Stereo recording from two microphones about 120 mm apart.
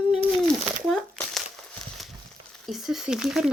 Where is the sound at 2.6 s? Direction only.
Centre (ahead or behind).